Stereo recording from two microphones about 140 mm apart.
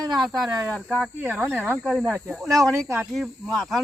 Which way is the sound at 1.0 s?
5° right (ahead or behind).